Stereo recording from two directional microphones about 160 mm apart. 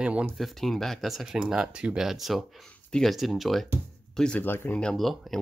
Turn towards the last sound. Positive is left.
turn(degrees=0)  # may be behind; listen again after turning